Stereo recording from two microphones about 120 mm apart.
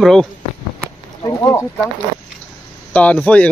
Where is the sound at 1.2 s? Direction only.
30° left (ahead or behind).